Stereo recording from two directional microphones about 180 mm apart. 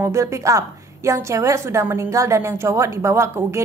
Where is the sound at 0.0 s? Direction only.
15° right (ahead or behind).